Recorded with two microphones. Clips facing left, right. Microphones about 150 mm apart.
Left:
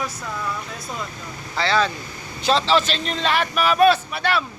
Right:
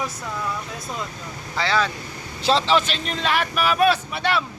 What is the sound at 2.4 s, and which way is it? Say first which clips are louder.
Speech: even; 30° right (ahead or behind).